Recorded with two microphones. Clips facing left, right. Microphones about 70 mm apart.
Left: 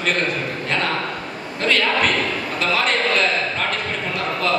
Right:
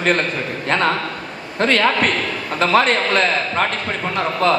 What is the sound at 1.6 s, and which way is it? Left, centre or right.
A man's voice, right.